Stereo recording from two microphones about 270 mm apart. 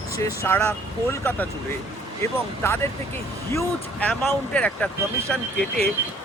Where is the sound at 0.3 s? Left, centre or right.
Centre.